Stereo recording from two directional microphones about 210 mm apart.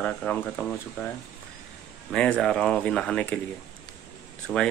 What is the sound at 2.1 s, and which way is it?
Speech, 5° left (ahead or behind).